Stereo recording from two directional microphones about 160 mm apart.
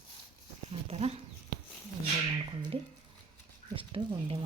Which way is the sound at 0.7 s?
40° right (ahead or behind).